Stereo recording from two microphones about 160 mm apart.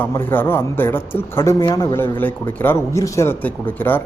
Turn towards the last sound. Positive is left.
turn(degrees=10)  # may be behind; listen again after turning